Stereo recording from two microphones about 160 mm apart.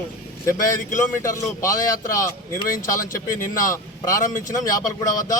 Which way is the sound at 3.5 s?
20° left (ahead or behind).